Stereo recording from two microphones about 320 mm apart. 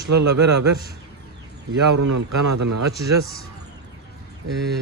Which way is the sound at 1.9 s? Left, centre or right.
Right.